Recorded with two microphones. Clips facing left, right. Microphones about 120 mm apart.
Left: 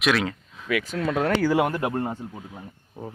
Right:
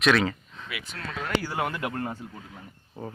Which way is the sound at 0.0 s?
Centre (ahead or behind).